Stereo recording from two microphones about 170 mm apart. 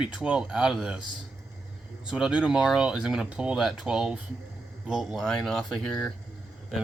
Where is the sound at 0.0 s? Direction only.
5° right (ahead or behind).